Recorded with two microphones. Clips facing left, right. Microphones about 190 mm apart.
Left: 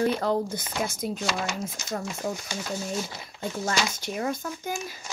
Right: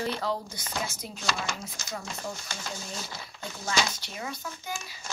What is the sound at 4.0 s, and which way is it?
Speech, 50° left (ahead or behind).